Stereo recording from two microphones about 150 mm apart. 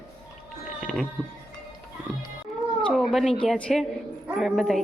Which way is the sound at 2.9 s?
Centre (ahead or behind).